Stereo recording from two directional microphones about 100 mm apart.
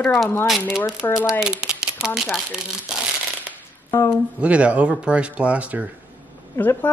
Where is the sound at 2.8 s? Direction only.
5° right (ahead or behind).